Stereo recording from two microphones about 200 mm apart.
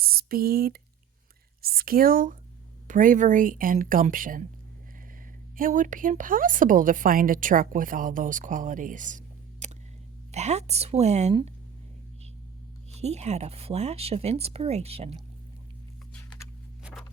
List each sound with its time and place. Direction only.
0.0 s a woman's voice: 50° right (ahead or behind)
5.5 s a woman's voice: 40° right (ahead or behind)
13.0 s a woman's voice: 35° right (ahead or behind)